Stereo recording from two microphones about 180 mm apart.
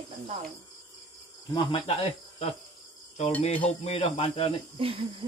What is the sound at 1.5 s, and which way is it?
Speech, 30° left (ahead or behind).